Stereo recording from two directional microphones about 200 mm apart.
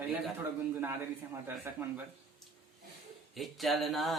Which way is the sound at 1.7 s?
10° right (ahead or behind).